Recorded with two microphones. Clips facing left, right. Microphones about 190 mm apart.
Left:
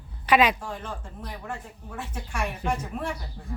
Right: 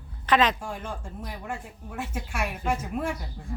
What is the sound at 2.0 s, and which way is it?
Speech, 10° right (ahead or behind).